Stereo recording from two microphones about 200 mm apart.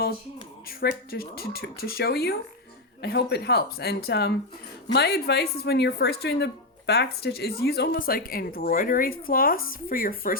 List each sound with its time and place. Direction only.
0.7 s speech: 50° left (ahead or behind)